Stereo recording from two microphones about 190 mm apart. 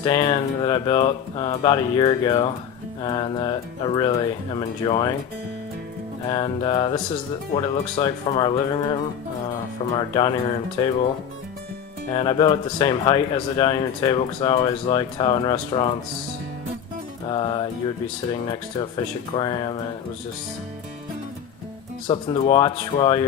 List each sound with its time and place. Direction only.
0.0 s speech: 20° left (ahead or behind)
6.2 s speech: 25° left (ahead or behind)
12.1 s speech: 25° left (ahead or behind)
17.2 s music: 25° left (ahead or behind)
19.3 s speech: 25° left (ahead or behind)
22.0 s speech: 25° left (ahead or behind)